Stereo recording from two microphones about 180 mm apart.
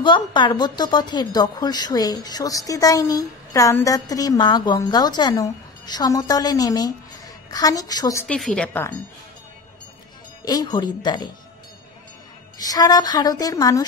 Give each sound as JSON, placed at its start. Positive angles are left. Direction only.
{"t": 0.0, "sound": "speech", "side_deg": 25}
{"t": 8.3, "sound": "a woman's voice", "side_deg": 5}
{"t": 10.4, "sound": "speech", "side_deg": 20}
{"t": 12.5, "sound": "speech", "side_deg": 20}